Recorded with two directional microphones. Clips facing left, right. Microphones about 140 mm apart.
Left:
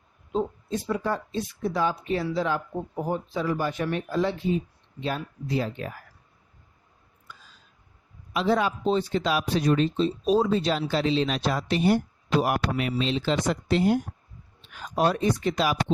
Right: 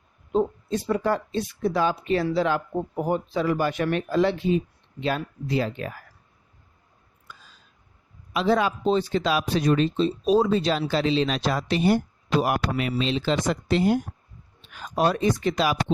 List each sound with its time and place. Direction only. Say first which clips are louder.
0.3 s speech: right 4 dB; 60° right (ahead or behind); by 5.9 s 90° right
8.3 s speech: right 2 dB; 90° right